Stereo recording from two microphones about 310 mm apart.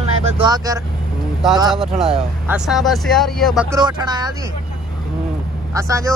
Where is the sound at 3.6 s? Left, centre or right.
Centre.